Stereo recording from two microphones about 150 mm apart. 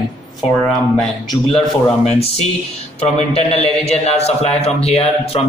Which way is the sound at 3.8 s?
45° left (ahead or behind).